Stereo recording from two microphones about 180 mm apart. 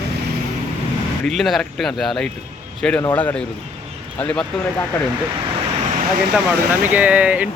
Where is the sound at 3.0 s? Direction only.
15° left (ahead or behind).